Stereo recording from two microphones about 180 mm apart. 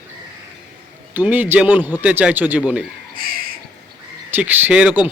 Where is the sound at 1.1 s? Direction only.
10° right (ahead or behind).